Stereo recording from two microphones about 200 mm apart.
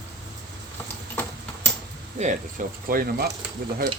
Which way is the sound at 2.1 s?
40° right (ahead or behind).